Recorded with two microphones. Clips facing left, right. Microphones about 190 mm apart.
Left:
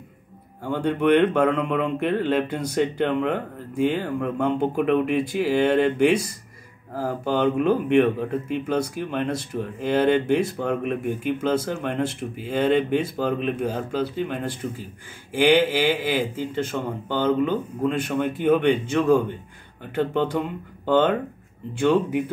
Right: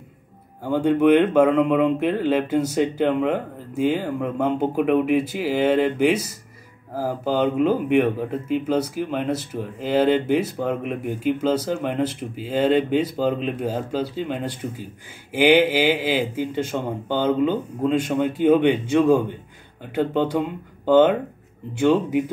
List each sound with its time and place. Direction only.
0.7 s speech: 5° right (ahead or behind)